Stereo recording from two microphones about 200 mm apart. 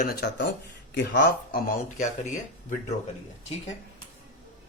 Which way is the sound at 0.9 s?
60° left (ahead or behind).